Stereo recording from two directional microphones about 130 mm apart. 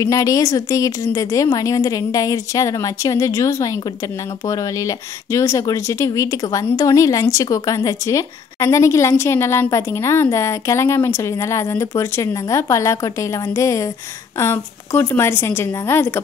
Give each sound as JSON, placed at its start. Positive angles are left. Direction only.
{"t": 0.0, "sound": "a woman's voice", "side_deg": 25}